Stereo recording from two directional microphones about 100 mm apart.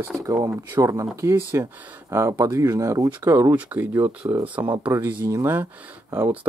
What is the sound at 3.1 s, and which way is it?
Speech, 20° right (ahead or behind).